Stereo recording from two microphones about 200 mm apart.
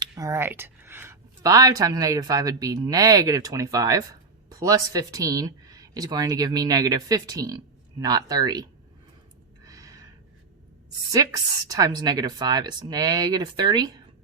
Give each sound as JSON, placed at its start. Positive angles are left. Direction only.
{"t": 0.0, "sound": "speech", "side_deg": -15}
{"t": 9.6, "sound": "gasp", "side_deg": -20}
{"t": 11.1, "sound": "speech", "side_deg": -20}